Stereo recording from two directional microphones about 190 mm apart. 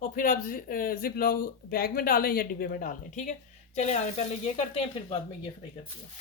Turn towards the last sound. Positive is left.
turn(degrees=30)  # may be behind; listen again after turning